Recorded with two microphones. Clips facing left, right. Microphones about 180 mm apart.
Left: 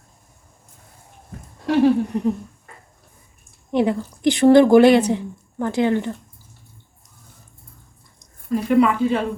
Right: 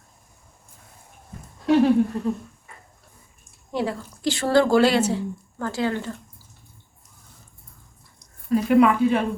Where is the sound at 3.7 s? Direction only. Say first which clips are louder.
Left 7 dB; 20° left (ahead or behind).